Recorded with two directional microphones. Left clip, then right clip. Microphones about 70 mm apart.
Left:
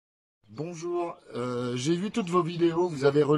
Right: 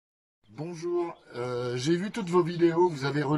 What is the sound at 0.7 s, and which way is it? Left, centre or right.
Speech, left.